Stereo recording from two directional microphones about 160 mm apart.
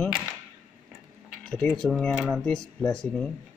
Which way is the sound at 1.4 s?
5° left (ahead or behind).